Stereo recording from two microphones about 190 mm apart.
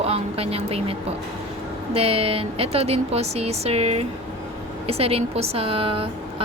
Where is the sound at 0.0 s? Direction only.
30° right (ahead or behind).